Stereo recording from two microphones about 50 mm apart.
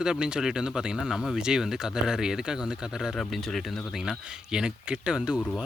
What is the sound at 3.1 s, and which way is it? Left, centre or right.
Speech, centre.